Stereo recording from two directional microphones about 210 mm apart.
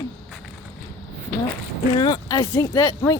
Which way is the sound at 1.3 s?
50° left (ahead or behind).